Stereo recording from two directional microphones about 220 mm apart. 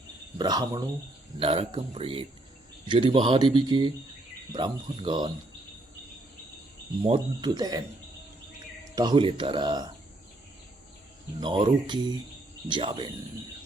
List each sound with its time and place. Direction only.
0.3 s speech: 20° right (ahead or behind)
7.0 s speech: 20° right (ahead or behind)
9.0 s speech: 20° right (ahead or behind)
11.3 s speech: 20° right (ahead or behind)